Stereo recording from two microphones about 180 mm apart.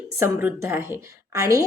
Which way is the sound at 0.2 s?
15° right (ahead or behind).